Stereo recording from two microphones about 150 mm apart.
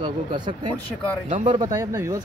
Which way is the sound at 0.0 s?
35° right (ahead or behind).